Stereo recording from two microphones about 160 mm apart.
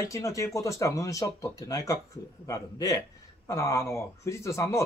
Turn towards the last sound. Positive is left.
turn(degrees=20)  # may be behind; listen again after turning